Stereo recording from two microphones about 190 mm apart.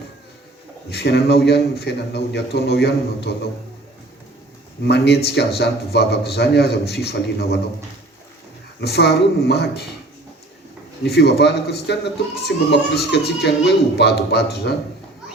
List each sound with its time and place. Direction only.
0.9 s speech: 60° left (ahead or behind)
4.8 s speech: 60° left (ahead or behind)
8.8 s speech: 60° left (ahead or behind)
11.0 s speech: 60° left (ahead or behind)